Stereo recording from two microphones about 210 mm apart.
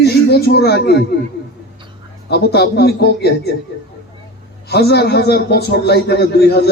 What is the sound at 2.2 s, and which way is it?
A man's voice, 50° left (ahead or behind).